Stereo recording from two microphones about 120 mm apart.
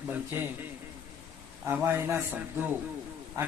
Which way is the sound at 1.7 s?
20° right (ahead or behind).